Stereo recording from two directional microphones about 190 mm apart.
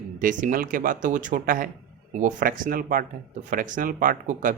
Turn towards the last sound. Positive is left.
turn(degrees=-45)  # may be behind; listen again after turning